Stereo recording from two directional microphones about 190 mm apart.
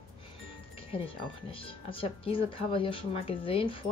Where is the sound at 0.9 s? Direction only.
30° left (ahead or behind).